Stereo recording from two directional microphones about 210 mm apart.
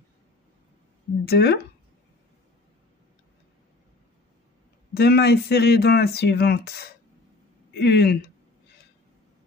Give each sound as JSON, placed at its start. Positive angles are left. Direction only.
{"t": 1.2, "sound": "speech", "side_deg": 50}
{"t": 4.9, "sound": "speech", "side_deg": 50}